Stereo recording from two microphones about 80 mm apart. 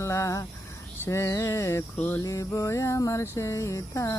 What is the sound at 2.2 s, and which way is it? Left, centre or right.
Mantra, left.